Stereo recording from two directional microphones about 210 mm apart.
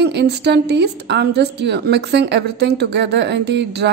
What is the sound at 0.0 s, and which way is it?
A woman's voice, 55° right (ahead or behind).